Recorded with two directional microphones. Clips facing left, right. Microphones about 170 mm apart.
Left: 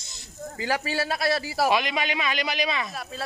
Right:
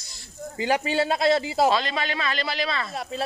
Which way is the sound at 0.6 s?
20° right (ahead or behind).